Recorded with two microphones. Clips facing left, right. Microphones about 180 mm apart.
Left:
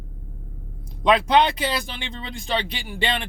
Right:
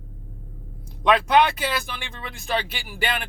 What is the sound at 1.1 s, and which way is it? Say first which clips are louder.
Speech: even; 20° left (ahead or behind).